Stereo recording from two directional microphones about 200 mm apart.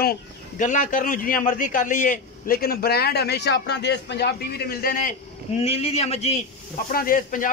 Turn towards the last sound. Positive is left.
turn(degrees=45)  # may be behind; listen again after turning